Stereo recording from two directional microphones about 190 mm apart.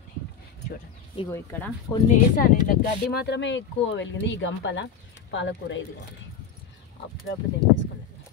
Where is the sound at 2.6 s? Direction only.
60° left (ahead or behind); by 5.8 s 75° left (ahead or behind).